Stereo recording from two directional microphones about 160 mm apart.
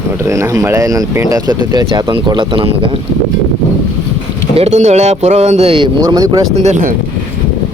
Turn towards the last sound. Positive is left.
turn(degrees=-45)  # may be behind; listen again after turning